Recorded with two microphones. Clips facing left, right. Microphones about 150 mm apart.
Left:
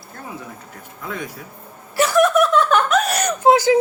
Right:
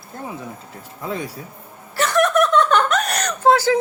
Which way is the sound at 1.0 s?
30° right (ahead or behind).